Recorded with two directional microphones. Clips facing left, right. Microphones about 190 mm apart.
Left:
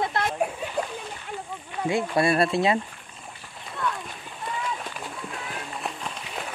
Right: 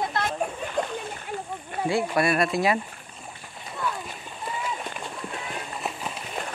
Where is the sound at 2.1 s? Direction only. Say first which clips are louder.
Left 4 dB; 30° left (ahead or behind).